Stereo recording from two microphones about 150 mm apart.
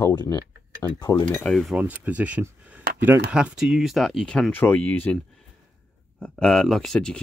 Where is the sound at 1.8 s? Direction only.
10° right (ahead or behind).